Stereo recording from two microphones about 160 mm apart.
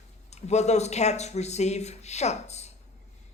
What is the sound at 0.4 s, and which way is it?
A man's voice, 45° left (ahead or behind).